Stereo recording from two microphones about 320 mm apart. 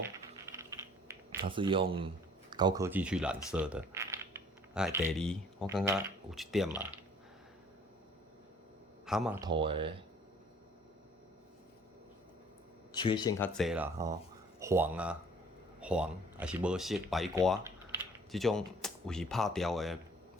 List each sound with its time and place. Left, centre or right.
0.5 s typing: centre
1.5 s speech: centre
9.0 s speech: centre
12.9 s speech: centre
13.6 s speech: centre